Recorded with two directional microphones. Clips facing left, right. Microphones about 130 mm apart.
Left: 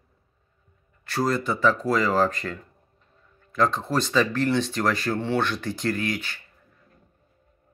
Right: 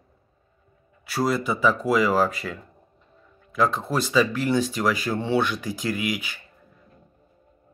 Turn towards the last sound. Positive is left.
turn(degrees=-10)  # may be behind; listen again after turning